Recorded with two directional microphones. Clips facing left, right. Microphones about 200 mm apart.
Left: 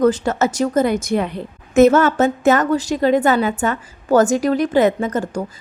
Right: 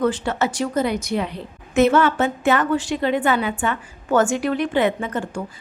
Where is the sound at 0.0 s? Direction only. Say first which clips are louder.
Left 5 dB; 40° left (ahead or behind).